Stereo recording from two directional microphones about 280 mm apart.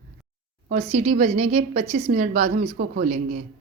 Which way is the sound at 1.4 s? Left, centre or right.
Right.